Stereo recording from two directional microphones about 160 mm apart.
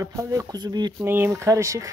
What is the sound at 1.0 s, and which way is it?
Speech, 15° right (ahead or behind).